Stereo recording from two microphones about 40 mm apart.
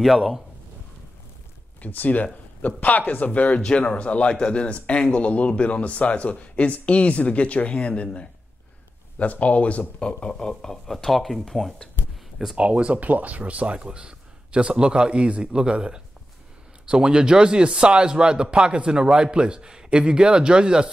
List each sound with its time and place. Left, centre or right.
1.8 s speech: left
3.5 s a man's voice: left
10.6 s speech: centre
12.5 s a man's voice: right
13.0 s speech: right
13.7 s a man's voice: right